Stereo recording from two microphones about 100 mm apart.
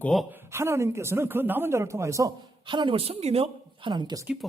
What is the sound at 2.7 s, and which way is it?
Speech, 55° right (ahead or behind).